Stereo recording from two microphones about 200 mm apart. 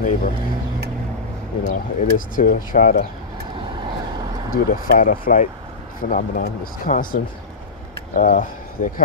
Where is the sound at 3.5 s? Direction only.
25° right (ahead or behind).